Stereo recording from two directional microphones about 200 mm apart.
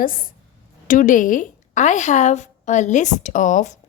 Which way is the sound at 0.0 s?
45° left (ahead or behind).